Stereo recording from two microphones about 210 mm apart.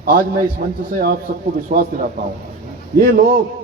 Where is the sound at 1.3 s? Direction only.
45° right (ahead or behind).